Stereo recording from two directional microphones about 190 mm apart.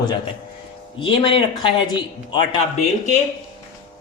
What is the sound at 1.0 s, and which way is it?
Speech, 25° left (ahead or behind).